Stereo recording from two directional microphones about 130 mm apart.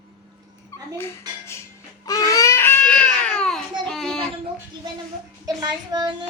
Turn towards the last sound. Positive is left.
turn(degrees=-30)  # may be behind; listen again after turning